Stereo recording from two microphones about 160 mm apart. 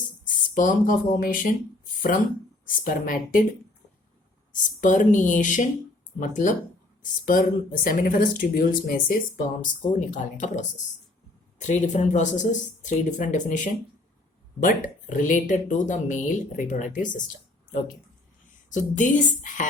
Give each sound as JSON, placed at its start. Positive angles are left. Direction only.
{"t": 0.3, "sound": "speech", "side_deg": 55}
{"t": 4.8, "sound": "speech", "side_deg": 55}
{"t": 9.9, "sound": "speech", "side_deg": 55}
{"t": 18.7, "sound": "speech", "side_deg": 50}